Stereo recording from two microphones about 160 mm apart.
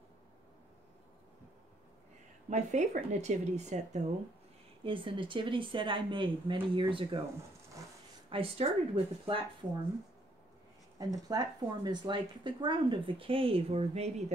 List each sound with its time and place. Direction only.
2.5 s speech: 45° right (ahead or behind)
4.8 s a woman's voice: 30° right (ahead or behind)
8.3 s a woman's voice: 35° right (ahead or behind)
11.0 s a woman's voice: 25° right (ahead or behind); by 14.2 s 40° right (ahead or behind)